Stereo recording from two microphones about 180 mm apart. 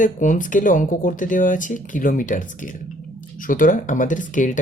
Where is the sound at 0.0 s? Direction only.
45° left (ahead or behind).